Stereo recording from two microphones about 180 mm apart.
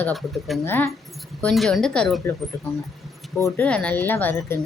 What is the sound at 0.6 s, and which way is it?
A woman's voice, 10° left (ahead or behind).